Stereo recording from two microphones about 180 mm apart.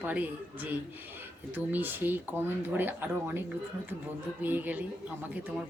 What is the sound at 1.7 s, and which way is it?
Speech, 10° right (ahead or behind).